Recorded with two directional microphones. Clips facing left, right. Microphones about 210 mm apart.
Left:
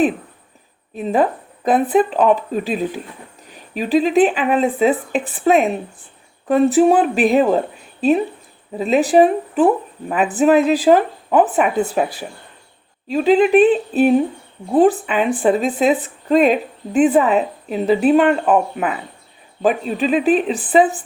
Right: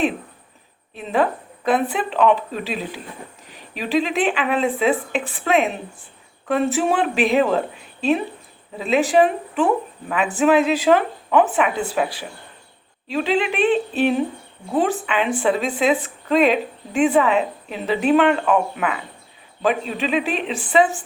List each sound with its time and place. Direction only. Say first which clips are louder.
0.9 s speech: left 3 dB; 40° left (ahead or behind)
8.8 s speech: left 4 dB; 40° left (ahead or behind)
13.1 s speech: left 8 dB; 40° left (ahead or behind)